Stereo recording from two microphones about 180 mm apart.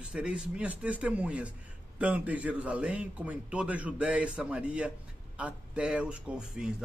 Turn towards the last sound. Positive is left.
turn(degrees=-5)  # may be behind; listen again after turning